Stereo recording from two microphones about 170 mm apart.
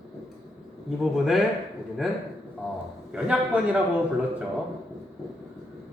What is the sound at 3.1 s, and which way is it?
Speech, 5° right (ahead or behind).